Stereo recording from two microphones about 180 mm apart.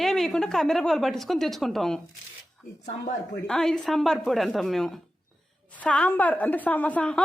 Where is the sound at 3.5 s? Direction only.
5° left (ahead or behind).